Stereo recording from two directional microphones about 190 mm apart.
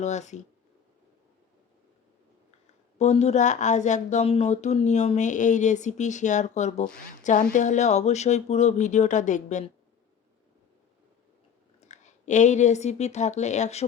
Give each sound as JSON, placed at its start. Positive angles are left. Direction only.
{"t": 0.0, "sound": "speech", "side_deg": 40}
{"t": 3.0, "sound": "speech", "side_deg": 35}
{"t": 11.9, "sound": "speech", "side_deg": 40}